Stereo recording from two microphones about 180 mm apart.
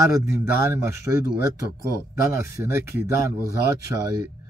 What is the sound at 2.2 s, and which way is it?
Speech, 15° right (ahead or behind).